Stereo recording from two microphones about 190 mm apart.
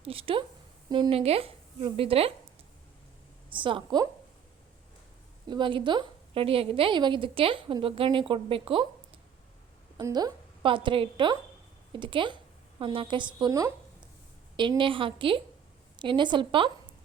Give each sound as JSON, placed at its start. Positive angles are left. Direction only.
{"t": 0.0, "sound": "a woman's voice", "side_deg": -30}
{"t": 3.5, "sound": "a woman's voice", "side_deg": -25}
{"t": 5.5, "sound": "a woman's voice", "side_deg": -25}
{"t": 10.0, "sound": "a woman's voice", "side_deg": -20}